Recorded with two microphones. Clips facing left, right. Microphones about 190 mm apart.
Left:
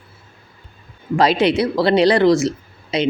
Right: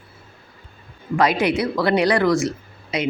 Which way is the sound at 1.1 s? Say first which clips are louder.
Left 3 dB; 30° left (ahead or behind).